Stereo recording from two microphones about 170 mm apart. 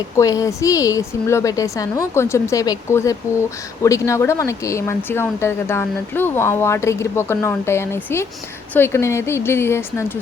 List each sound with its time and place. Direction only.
0.2 s a woman's voice: 20° left (ahead or behind)